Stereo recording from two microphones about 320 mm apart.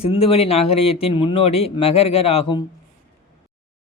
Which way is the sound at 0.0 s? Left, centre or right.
Centre.